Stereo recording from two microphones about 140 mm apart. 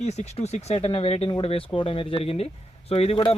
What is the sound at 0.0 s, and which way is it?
Speech, 50° left (ahead or behind).